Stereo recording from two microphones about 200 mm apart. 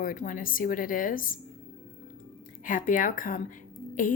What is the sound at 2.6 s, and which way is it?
Speech, 40° left (ahead or behind).